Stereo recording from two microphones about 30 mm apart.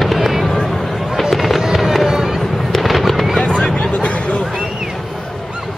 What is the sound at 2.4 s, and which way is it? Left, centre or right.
Fireworks, centre.